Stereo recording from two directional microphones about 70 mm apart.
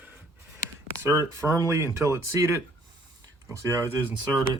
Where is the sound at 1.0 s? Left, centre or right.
Right.